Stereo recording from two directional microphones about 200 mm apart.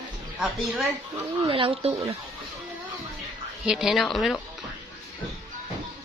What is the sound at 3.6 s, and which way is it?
Speech, centre (ahead or behind).